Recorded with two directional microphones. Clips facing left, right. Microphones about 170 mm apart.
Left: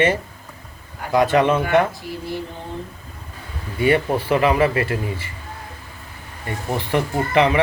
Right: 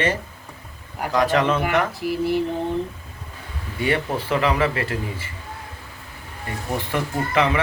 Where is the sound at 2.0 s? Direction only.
75° right (ahead or behind).